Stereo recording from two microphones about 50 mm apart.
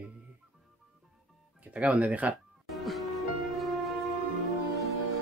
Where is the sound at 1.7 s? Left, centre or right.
Right.